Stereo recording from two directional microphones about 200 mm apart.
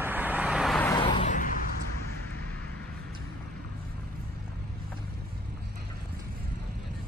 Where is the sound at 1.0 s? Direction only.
25° left (ahead or behind).